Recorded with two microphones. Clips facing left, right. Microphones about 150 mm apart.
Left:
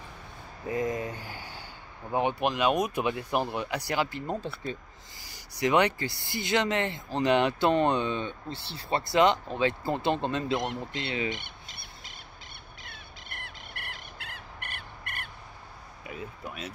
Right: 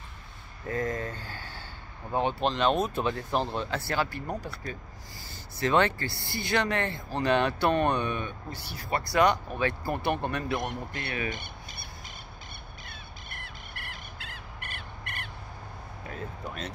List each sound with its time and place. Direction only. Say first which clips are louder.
0.7 s speech: left 1 dB; 15° left (ahead or behind)
11.2 s squawk: left 1 dB; 90° left
13.7 s cricket: even; 60° left (ahead or behind)
16.1 s a sound: right 1 dB; 10° left (ahead or behind)